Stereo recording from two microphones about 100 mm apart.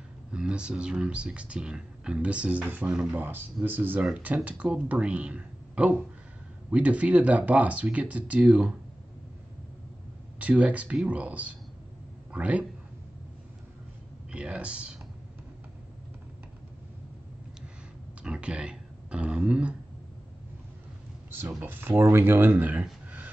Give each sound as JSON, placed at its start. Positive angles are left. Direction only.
{"t": 0.3, "sound": "speech", "side_deg": -10}
{"t": 10.4, "sound": "speech", "side_deg": -15}
{"t": 14.3, "sound": "speech", "side_deg": -10}
{"t": 18.2, "sound": "a sound", "side_deg": -10}
{"t": 21.3, "sound": "speech", "side_deg": -20}